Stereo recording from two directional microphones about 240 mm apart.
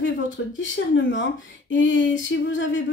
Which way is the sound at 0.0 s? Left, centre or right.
Left.